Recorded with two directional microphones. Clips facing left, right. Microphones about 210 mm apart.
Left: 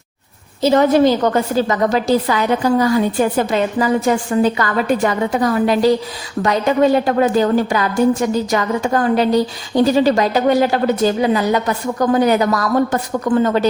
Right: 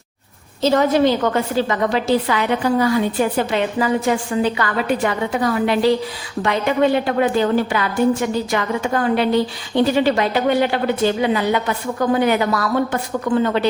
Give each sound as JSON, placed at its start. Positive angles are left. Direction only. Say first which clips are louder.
{"t": 0.8, "sound": "a woman's voice", "louder": "left 4 dB", "side_deg": 40}